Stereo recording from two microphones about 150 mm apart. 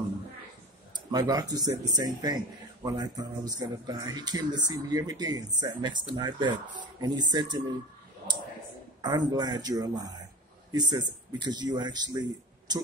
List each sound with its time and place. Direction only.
1.1 s speech: 25° right (ahead or behind)
9.0 s speech: 25° right (ahead or behind)